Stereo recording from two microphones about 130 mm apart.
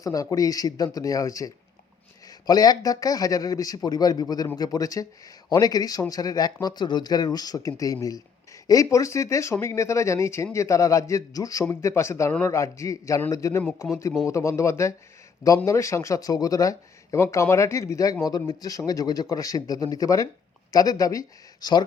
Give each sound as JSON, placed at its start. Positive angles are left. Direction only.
{"t": 0.0, "sound": "speech", "side_deg": 25}